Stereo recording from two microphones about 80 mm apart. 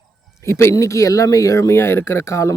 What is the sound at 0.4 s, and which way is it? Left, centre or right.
Speech, left.